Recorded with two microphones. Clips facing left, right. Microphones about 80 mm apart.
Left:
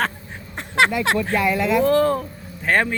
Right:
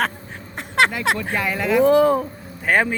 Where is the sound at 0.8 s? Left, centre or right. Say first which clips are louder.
Left 1 dB; centre.